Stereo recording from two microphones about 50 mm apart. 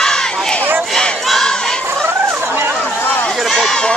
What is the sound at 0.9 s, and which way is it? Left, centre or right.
Battle cry, centre.